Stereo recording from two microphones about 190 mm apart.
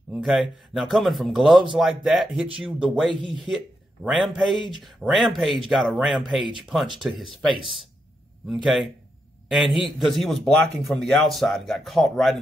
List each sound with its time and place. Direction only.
0.1 s a man's voice: centre (ahead or behind)
8.5 s a man's voice: centre (ahead or behind)